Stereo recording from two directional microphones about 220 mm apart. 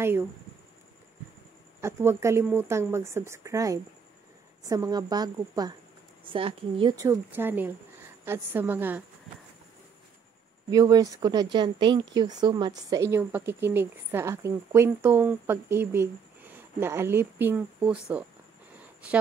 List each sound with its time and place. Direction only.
0.0 s speech: 10° right (ahead or behind)
1.8 s speech: 10° right (ahead or behind)
10.7 s speech: 15° right (ahead or behind)